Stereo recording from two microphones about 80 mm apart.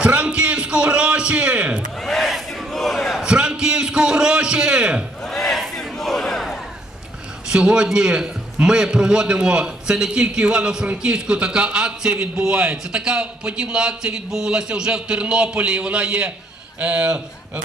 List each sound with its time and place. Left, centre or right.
0.0 s a man's voice: centre
2.0 s crowd: centre
3.2 s a sound: centre
5.2 s battle cry: centre
7.5 s a man's voice: centre